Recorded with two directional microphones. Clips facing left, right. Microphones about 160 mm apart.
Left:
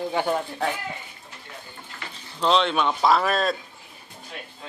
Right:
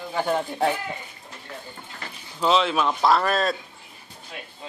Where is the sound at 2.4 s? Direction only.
5° right (ahead or behind).